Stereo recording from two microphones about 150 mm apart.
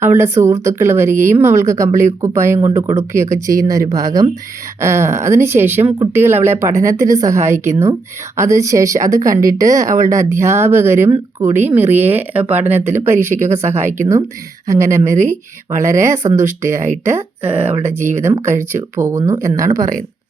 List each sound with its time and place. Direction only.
0.0 s speech: 15° right (ahead or behind)